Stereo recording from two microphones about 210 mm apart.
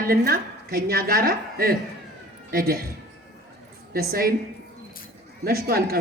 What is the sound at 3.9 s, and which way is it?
Speech, 45° right (ahead or behind).